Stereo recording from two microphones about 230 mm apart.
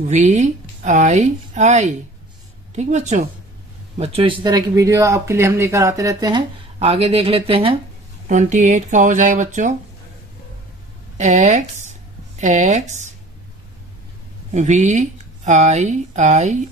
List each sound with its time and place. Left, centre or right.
0.2 s speech: right
11.1 s speech: right
14.5 s speech: right